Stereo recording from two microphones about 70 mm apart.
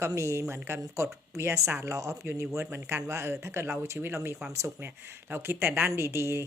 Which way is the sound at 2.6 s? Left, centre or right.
Right.